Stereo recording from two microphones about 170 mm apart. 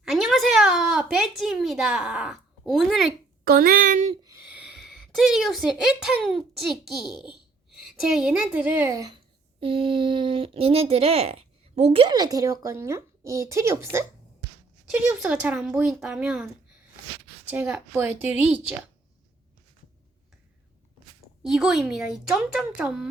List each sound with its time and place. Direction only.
0.0 s a sound: centre (ahead or behind)
3.4 s speech: 60° right (ahead or behind)
4.2 s a sound: 20° right (ahead or behind)
4.4 s speech: 5° right (ahead or behind)
7.1 s a child's voice: 25° left (ahead or behind)
7.8 s a woman's voice: centre (ahead or behind); by 9.1 s 20° right (ahead or behind)
9.6 s speech: 30° right (ahead or behind)
12.0 s a woman's voice: 25° right (ahead or behind)
14.9 s a woman's voice: 5° right (ahead or behind)
17.5 s a woman's voice: 10° right (ahead or behind)
21.4 s a woman's voice: centre (ahead or behind)